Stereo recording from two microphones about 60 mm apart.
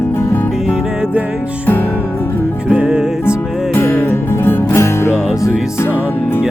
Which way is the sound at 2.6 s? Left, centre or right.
Centre.